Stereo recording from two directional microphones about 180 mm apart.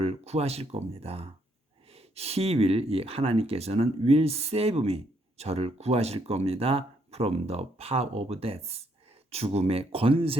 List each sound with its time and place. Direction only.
0.0 s speech: 35° right (ahead or behind)